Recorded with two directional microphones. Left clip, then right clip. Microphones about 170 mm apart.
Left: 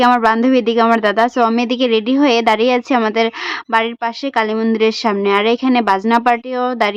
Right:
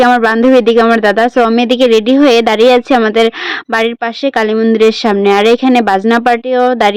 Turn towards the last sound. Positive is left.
turn(degrees=-25)  # may be behind; listen again after turning